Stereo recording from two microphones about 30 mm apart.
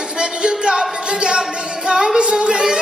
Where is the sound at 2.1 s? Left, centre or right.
Right.